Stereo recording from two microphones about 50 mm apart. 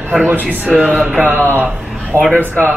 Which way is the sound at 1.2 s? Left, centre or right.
Right.